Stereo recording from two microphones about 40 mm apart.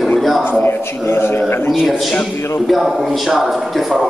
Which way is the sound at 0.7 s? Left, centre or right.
Left.